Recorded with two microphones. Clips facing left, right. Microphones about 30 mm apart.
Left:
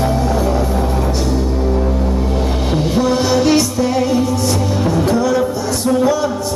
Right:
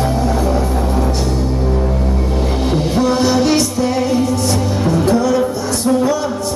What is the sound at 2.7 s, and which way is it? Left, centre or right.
Music, centre.